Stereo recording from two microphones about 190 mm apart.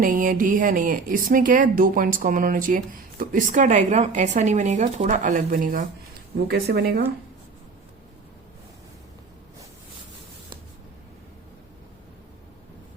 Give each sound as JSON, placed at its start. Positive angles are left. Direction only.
{"t": 0.0, "sound": "speech", "side_deg": -45}
{"t": 6.5, "sound": "speech", "side_deg": -55}